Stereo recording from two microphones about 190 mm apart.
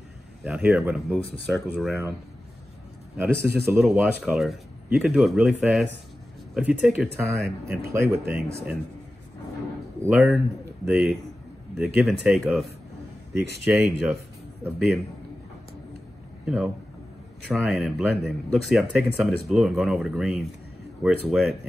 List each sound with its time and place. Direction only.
0.4 s speech: 5° right (ahead or behind)
3.2 s speech: 10° right (ahead or behind)
10.0 s speech: 10° right (ahead or behind)
14.6 s speech: 5° right (ahead or behind)
16.4 s a man's voice: 5° right (ahead or behind)